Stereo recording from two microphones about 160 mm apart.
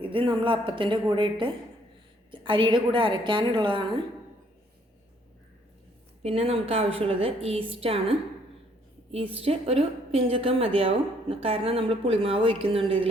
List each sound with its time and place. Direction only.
0.0 s a woman's voice: 35° right (ahead or behind)
6.2 s a woman's voice: 40° right (ahead or behind)
9.3 s a woman's voice: 35° right (ahead or behind)